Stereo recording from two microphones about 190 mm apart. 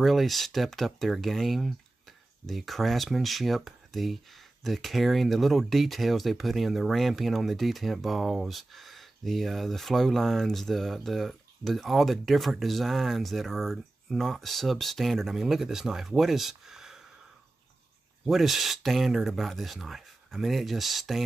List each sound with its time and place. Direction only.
0.0 s speech: centre (ahead or behind)
18.2 s speech: centre (ahead or behind)